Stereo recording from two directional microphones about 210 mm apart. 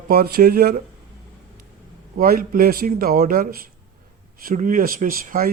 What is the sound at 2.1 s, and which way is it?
Speech, 45° right (ahead or behind).